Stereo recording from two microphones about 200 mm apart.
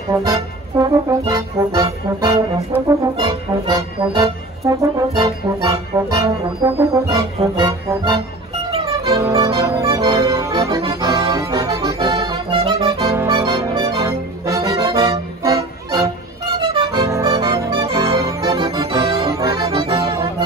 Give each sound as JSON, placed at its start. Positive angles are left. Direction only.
{"t": 0.1, "sound": "music", "side_deg": -20}
{"t": 10.9, "sound": "accordion", "side_deg": -15}
{"t": 16.5, "sound": "music", "side_deg": -20}